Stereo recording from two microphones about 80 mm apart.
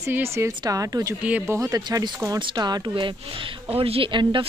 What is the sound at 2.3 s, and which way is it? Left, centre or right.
Speech, right.